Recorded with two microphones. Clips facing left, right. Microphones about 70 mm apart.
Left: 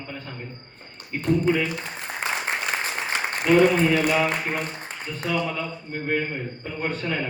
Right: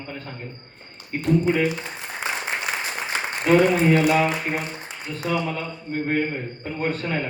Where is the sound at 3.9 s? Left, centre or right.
Right.